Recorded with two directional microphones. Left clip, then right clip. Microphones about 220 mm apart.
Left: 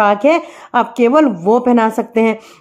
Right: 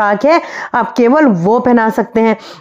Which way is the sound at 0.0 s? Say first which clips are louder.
Right 1 dB; 25° right (ahead or behind).